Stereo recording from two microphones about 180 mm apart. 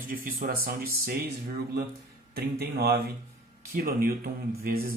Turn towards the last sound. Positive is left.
turn(degrees=-55)  # may be behind; listen again after turning